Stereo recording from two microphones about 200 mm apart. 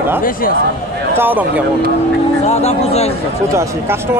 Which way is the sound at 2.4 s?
30° left (ahead or behind).